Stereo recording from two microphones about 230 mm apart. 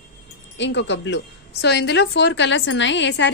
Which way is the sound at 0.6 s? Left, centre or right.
Left.